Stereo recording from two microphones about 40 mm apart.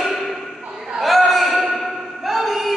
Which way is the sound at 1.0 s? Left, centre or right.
Centre.